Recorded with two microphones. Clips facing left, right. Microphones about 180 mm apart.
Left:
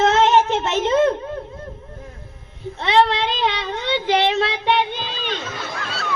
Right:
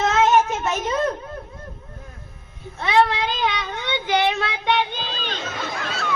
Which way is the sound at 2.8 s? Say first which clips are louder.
Left 2 dB; 25° left (ahead or behind).